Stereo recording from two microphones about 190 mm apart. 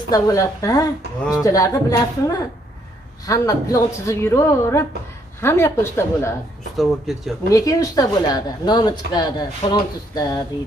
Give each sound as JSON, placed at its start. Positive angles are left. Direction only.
{"t": 0.1, "sound": "a woman's voice", "side_deg": 20}
{"t": 6.8, "sound": "speech", "side_deg": 0}
{"t": 7.5, "sound": "speech", "side_deg": 20}